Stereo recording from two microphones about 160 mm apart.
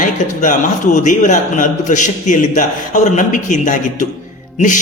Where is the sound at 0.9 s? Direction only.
50° left (ahead or behind).